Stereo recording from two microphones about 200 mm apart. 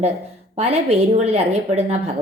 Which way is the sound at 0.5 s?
30° right (ahead or behind).